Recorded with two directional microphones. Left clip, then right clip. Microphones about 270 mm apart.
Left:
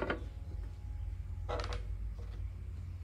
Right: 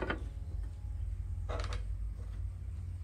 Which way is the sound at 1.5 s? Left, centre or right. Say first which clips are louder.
Left 3 dB; left.